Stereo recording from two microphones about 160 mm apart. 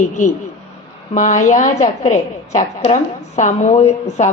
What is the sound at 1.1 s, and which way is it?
A woman's voice, 50° left (ahead or behind).